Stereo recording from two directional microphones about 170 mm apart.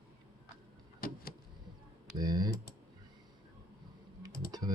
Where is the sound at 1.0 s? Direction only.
60° left (ahead or behind).